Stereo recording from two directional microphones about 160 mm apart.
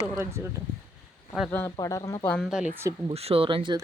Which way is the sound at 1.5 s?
15° left (ahead or behind).